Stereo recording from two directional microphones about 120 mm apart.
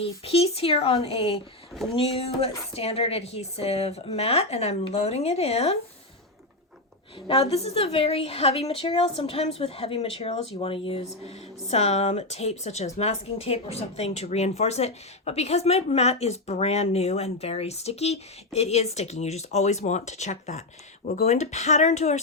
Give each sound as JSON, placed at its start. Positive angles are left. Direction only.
{"t": 0.0, "sound": "speech", "side_deg": 55}
{"t": 7.3, "sound": "speech", "side_deg": 55}
{"t": 11.7, "sound": "speech", "side_deg": 65}